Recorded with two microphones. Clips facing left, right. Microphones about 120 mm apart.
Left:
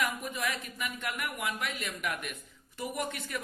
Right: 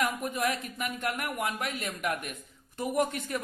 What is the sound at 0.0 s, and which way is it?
A man's voice, 45° right (ahead or behind).